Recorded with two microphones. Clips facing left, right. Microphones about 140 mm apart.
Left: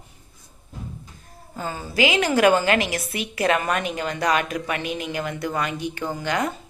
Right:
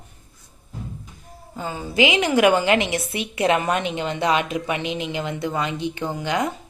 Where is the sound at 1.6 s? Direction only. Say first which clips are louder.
Right 2 dB; 15° right (ahead or behind).